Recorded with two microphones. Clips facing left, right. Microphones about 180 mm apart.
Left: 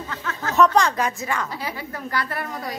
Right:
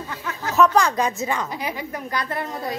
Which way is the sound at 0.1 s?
15° right (ahead or behind).